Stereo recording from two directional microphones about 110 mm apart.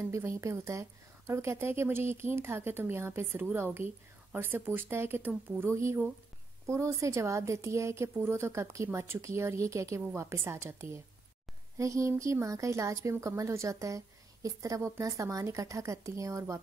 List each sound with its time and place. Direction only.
0.1 s speech: 25° right (ahead or behind)